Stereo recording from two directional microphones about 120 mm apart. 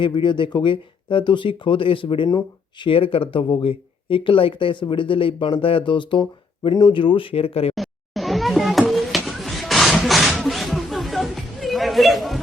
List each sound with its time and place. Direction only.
0.0 s speech: 45° left (ahead or behind)
7.8 s music: centre (ahead or behind)
8.9 s a sound: centre (ahead or behind)